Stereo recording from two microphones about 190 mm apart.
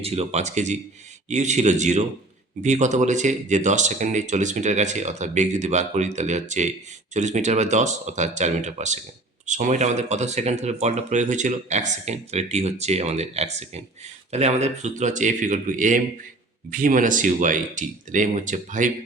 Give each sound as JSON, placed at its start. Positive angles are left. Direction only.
{"t": 0.0, "sound": "speech", "side_deg": -35}